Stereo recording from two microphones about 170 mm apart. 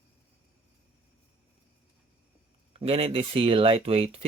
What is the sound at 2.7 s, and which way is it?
Speech, 35° right (ahead or behind).